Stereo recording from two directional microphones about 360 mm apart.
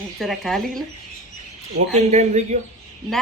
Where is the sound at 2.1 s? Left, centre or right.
Centre.